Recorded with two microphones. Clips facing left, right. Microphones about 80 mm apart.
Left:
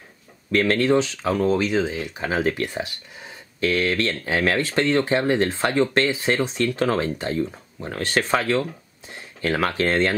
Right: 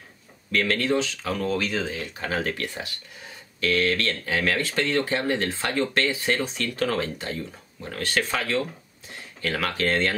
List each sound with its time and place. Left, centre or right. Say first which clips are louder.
0.5 s speech: left 5 dB; left